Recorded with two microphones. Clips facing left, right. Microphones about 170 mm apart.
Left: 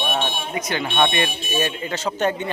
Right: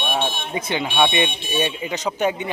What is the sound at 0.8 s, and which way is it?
Speech, 10° right (ahead or behind).